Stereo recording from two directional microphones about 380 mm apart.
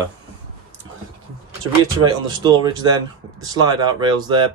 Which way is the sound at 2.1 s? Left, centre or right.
Centre.